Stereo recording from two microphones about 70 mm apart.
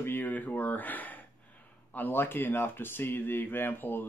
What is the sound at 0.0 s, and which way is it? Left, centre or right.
Speech, left.